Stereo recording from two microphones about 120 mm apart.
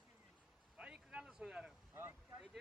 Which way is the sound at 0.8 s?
5° right (ahead or behind).